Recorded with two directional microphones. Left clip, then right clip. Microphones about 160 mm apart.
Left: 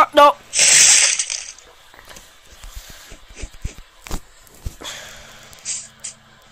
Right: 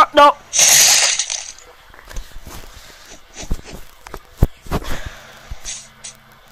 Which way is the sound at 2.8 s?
Centre (ahead or behind).